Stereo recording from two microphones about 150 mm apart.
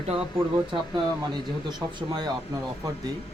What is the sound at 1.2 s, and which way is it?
Speech, 30° right (ahead or behind).